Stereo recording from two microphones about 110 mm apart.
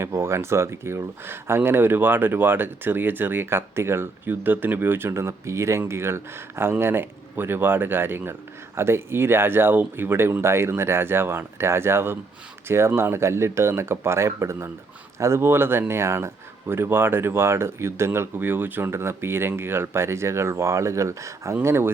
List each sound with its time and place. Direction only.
0.0 s speech: 25° right (ahead or behind)